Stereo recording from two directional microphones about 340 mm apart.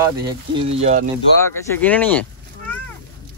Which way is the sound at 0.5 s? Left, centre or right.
Centre.